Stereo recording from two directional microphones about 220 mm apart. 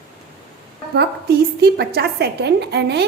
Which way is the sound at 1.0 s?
45° right (ahead or behind).